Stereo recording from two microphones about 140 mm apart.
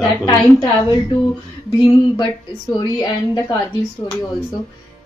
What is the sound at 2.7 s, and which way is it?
Speech, 30° left (ahead or behind).